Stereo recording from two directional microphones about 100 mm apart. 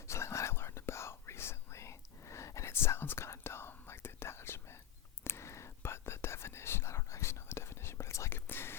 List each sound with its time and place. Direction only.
0.1 s whispering: 30° left (ahead or behind)